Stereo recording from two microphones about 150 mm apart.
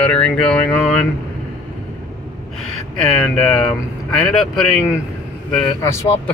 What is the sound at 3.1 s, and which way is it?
Speech, centre (ahead or behind).